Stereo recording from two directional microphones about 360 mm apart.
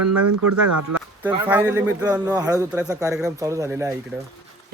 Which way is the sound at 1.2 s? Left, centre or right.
Centre.